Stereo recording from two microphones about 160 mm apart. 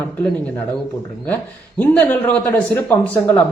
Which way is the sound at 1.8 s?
10° left (ahead or behind).